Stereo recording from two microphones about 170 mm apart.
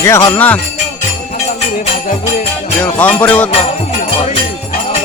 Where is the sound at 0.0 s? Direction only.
15° left (ahead or behind).